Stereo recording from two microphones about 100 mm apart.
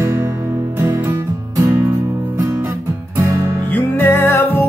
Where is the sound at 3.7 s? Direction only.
20° left (ahead or behind).